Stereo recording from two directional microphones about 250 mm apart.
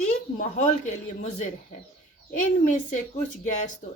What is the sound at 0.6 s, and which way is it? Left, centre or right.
Speech, left.